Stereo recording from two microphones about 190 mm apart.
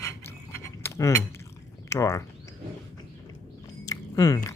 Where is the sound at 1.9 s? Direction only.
15° left (ahead or behind).